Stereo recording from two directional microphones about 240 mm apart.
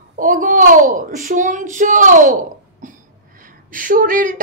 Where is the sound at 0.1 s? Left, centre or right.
Right.